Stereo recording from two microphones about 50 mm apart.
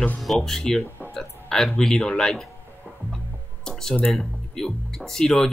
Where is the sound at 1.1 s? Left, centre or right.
Centre.